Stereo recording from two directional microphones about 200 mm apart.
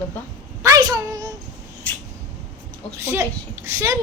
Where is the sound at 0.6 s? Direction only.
20° right (ahead or behind).